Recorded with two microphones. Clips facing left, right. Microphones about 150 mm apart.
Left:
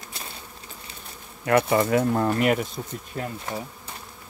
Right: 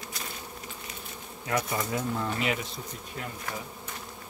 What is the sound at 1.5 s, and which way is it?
Speech, 70° left (ahead or behind).